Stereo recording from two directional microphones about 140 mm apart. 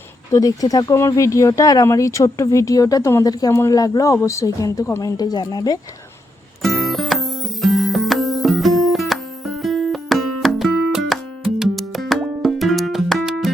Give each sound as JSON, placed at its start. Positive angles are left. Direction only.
{"t": 0.3, "sound": "speech", "side_deg": 25}
{"t": 6.6, "sound": "music", "side_deg": 0}